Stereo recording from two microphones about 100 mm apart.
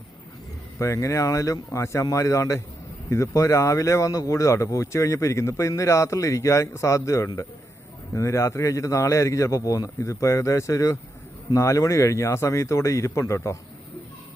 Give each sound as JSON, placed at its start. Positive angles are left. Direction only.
{"t": 0.8, "sound": "speech", "side_deg": 30}